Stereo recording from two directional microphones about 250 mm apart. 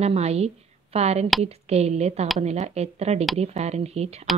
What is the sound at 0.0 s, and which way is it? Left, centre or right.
Speech, right.